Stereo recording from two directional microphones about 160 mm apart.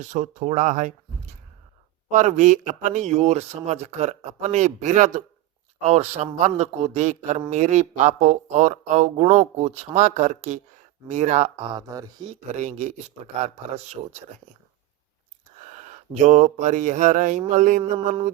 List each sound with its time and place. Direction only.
0.0 s speech: 50° right (ahead or behind)
2.0 s speech: 50° right (ahead or behind); by 12.3 s 25° right (ahead or behind)
12.3 s speech: 45° right (ahead or behind)
15.9 s speech: 50° right (ahead or behind)